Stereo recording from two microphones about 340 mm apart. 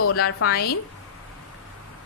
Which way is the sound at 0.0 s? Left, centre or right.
Left.